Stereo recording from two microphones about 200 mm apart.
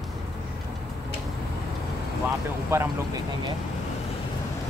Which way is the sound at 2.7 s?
10° right (ahead or behind).